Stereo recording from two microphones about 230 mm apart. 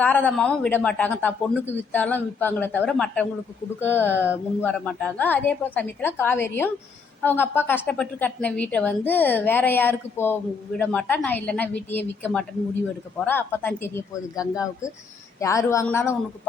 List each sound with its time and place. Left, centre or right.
0.0 s a woman's voice: centre